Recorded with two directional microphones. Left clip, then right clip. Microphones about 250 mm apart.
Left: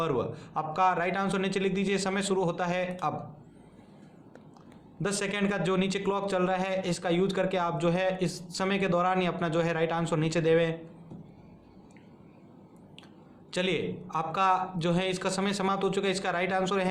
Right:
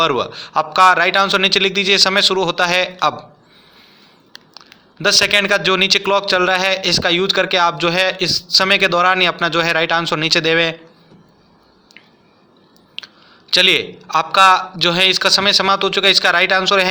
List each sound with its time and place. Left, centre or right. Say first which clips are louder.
0.2 s a man's voice: right 13 dB; right
5.0 s a man's voice: right 18 dB; right
13.5 s a man's voice: right 17 dB; right